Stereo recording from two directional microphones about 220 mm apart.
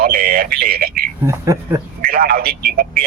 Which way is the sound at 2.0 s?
40° right (ahead or behind).